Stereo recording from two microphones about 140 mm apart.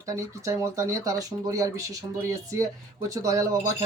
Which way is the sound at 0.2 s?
20° right (ahead or behind).